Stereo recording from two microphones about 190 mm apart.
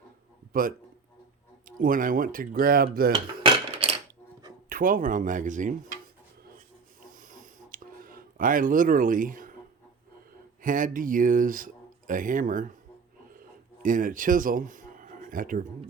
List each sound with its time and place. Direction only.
0.5 s speech: 50° right (ahead or behind)
3.1 s cutlery: 30° right (ahead or behind)
4.7 s speech: 45° right (ahead or behind)
7.2 s a sound: 45° right (ahead or behind)
10.6 s speech: 45° right (ahead or behind)
13.8 s speech: 45° right (ahead or behind)